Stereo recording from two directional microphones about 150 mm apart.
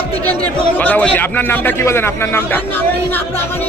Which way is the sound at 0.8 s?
10° left (ahead or behind).